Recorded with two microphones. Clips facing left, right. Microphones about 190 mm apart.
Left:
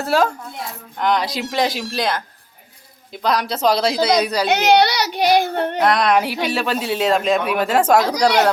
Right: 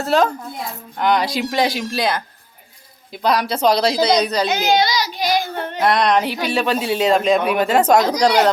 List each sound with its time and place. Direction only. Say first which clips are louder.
0.0 s speech: right 1 dB; 5° left (ahead or behind)
4.4 s a child's voice: left 3 dB; 70° left (ahead or behind)
5.8 s speech: right 1 dB; centre (ahead or behind)